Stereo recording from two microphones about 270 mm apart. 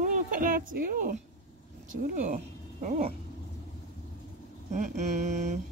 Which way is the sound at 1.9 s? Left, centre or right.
Right.